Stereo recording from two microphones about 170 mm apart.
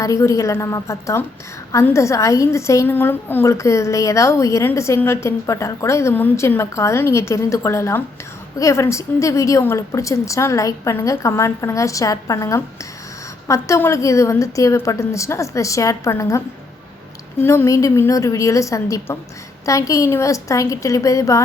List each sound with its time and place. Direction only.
0.0 s a woman's voice: 20° left (ahead or behind)
17.4 s a woman's voice: 15° left (ahead or behind)